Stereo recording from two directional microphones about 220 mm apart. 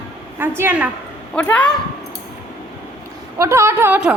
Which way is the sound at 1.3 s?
5° left (ahead or behind).